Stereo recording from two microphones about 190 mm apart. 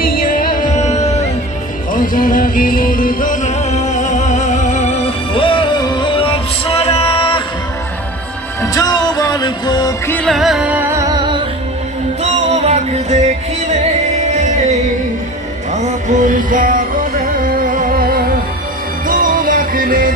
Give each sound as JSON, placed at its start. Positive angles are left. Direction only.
{"t": 0.0, "sound": "music", "side_deg": 50}
{"t": 8.7, "sound": "music", "side_deg": 20}
{"t": 10.1, "sound": "music", "side_deg": 0}
{"t": 12.2, "sound": "music", "side_deg": -35}
{"t": 15.7, "sound": "music", "side_deg": -40}